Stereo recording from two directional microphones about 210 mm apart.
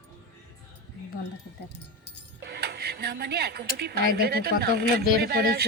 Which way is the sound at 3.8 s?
50° right (ahead or behind).